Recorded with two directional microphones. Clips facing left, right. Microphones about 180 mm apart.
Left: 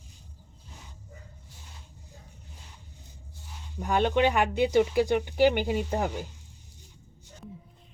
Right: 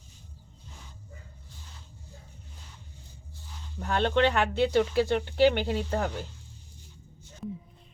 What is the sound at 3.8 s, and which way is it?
Speech, 10° left (ahead or behind).